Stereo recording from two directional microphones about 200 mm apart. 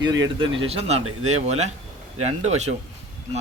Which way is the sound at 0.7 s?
30° right (ahead or behind).